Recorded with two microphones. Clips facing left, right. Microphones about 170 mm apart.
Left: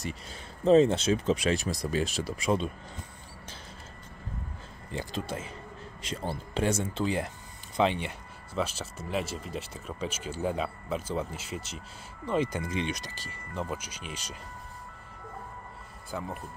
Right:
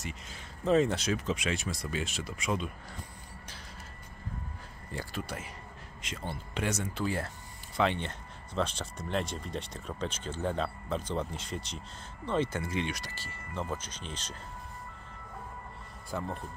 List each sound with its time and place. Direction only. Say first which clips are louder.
0.0 s speech: left 4 dB; 35° left (ahead or behind)
4.9 s speech: left 4 dB; 25° left (ahead or behind)
16.1 s speech: even; 5° left (ahead or behind)